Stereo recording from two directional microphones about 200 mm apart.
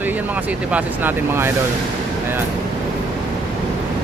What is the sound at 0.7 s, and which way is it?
Speech, 10° right (ahead or behind).